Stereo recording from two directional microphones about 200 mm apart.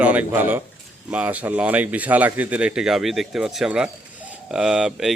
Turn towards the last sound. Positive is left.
turn(degrees=-5)  # may be behind; listen again after turning